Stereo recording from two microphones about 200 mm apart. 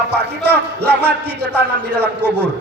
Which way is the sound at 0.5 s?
55° right (ahead or behind).